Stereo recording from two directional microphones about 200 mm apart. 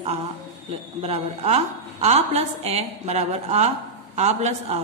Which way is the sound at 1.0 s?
30° right (ahead or behind).